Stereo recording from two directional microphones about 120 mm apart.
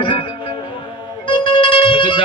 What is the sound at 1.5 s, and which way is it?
Music, 40° left (ahead or behind).